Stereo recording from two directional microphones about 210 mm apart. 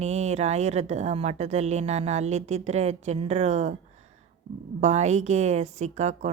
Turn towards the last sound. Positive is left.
turn(degrees=-35)  # may be behind; listen again after turning